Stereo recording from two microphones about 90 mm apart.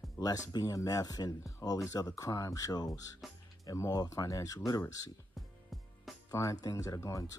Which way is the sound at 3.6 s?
40° left (ahead or behind).